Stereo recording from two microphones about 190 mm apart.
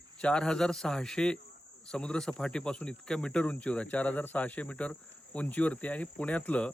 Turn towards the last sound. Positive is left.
turn(degrees=5)  # may be behind; listen again after turning